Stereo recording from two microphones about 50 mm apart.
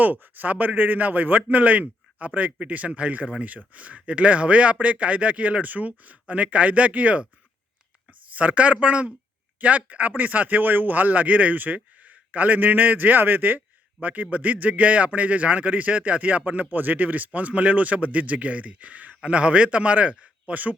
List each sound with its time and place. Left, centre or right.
0.0 s a man's voice: right
8.3 s a man's voice: right